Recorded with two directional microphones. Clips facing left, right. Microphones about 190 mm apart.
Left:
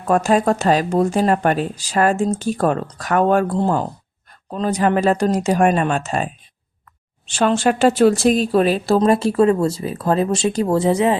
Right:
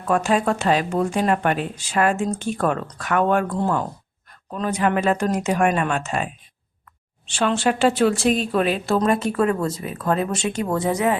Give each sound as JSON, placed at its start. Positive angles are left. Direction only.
{"t": 0.1, "sound": "a woman's voice", "side_deg": 40}
{"t": 7.3, "sound": "a woman's voice", "side_deg": 40}